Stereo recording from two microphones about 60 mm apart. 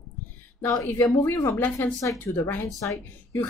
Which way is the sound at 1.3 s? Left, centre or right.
Left.